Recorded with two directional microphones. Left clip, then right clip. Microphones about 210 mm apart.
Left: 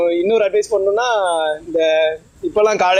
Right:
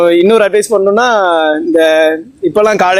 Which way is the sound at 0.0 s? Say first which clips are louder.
Right 8 dB; 55° right (ahead or behind).